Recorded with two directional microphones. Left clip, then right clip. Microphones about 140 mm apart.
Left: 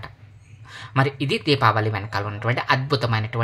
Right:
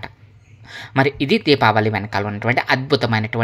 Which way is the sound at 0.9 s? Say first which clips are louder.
Right 5 dB; 35° right (ahead or behind).